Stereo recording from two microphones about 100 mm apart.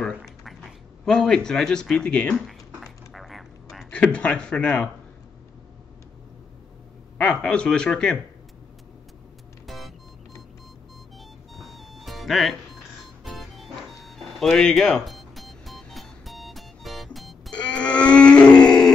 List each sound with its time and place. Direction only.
0.2 s a sound: centre (ahead or behind)
2.4 s a sound: centre (ahead or behind)
3.9 s speech: 10° left (ahead or behind)
7.2 s speech: 10° left (ahead or behind)
9.7 s music: centre (ahead or behind)
11.5 s music: centre (ahead or behind)
17.6 s grunt: 10° left (ahead or behind)